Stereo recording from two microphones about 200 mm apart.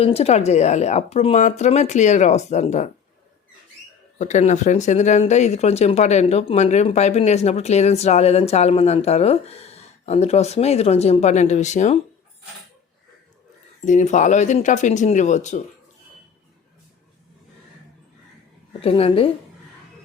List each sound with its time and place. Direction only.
0.0 s speech: 30° left (ahead or behind)
4.2 s speech: 35° left (ahead or behind)
13.8 s speech: 35° left (ahead or behind)
18.8 s a woman's voice: 30° left (ahead or behind)